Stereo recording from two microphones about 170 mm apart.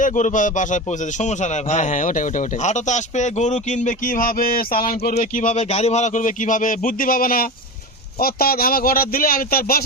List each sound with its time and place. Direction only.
0.0 s a man's voice: 45° left (ahead or behind)
5.1 s a man's voice: 50° left (ahead or behind)